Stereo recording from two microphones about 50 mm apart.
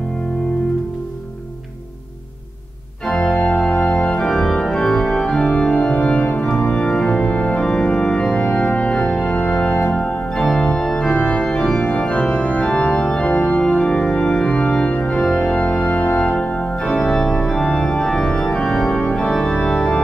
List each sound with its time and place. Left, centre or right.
3.1 s organ: centre
3.3 s organ: centre
11.1 s organ: left
11.4 s organ: centre
11.8 s organ: left
13.3 s organ: left; by 20.0 s centre